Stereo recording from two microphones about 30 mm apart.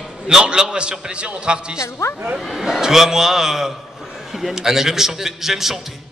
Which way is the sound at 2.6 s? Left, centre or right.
Centre.